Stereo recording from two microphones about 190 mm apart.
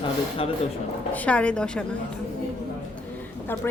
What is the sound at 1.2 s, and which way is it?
Speech, 5° left (ahead or behind).